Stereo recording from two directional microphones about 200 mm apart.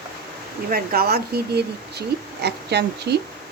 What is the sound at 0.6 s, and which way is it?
Speech, 50° right (ahead or behind).